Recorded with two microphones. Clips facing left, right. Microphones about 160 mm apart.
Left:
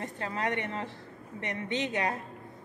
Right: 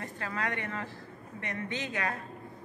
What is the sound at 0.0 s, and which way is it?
A woman's voice, 25° left (ahead or behind).